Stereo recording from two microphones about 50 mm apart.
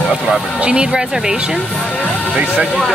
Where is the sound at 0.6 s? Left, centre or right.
Right.